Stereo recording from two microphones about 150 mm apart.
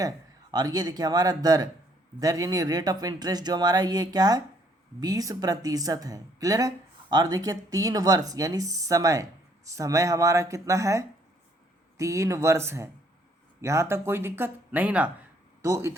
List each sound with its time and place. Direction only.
0.5 s speech: 25° right (ahead or behind)